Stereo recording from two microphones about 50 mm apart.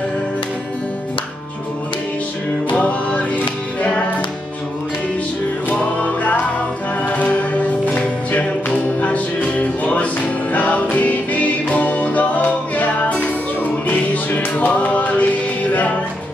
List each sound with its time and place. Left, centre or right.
2.7 s music: left
5.9 s music: left
13.8 s music: left